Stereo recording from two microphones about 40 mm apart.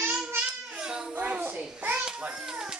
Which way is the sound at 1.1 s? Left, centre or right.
Right.